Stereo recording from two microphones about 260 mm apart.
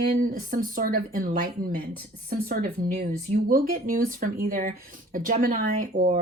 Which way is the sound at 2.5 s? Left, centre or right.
Right.